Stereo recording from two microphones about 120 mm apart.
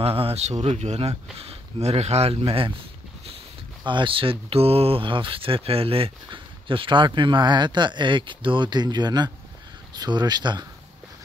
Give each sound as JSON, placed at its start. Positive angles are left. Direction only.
{"t": 0.0, "sound": "speech", "side_deg": -55}
{"t": 3.8, "sound": "speech", "side_deg": -40}